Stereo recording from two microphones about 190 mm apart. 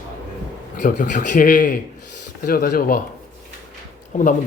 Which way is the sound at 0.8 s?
40° left (ahead or behind).